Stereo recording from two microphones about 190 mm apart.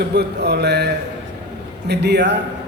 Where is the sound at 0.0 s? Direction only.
60° right (ahead or behind).